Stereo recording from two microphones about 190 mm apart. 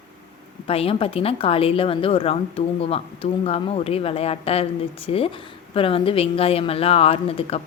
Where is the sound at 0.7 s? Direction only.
30° left (ahead or behind).